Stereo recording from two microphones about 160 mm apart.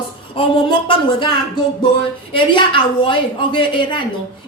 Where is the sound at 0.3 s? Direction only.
30° left (ahead or behind).